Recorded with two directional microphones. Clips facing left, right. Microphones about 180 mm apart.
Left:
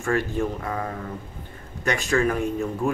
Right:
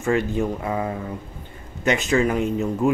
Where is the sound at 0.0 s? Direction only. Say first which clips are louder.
Right 3 dB; 20° right (ahead or behind).